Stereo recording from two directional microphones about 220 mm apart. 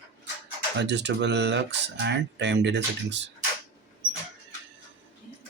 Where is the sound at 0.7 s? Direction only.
50° right (ahead or behind).